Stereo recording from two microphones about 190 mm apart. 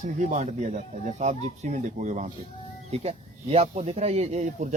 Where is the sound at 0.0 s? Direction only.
40° right (ahead or behind).